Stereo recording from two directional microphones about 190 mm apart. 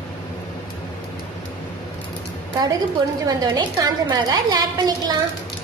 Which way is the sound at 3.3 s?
20° right (ahead or behind).